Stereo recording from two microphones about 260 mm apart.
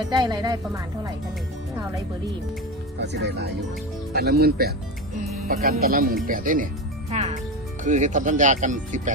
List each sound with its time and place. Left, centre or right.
0.1 s speech: centre
3.0 s speech: right
7.1 s music: right
7.9 s speech: right